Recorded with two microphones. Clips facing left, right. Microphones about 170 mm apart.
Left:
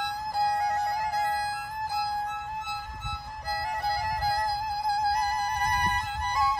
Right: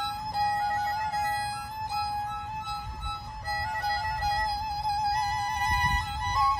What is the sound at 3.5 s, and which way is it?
Music, centre (ahead or behind).